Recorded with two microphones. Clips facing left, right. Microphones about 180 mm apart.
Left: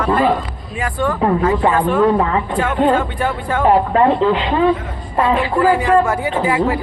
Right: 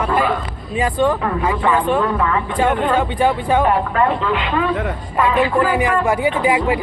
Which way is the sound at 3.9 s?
30° left (ahead or behind).